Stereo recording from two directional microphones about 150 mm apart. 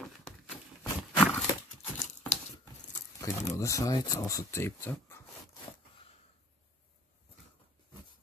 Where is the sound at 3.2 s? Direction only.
20° left (ahead or behind).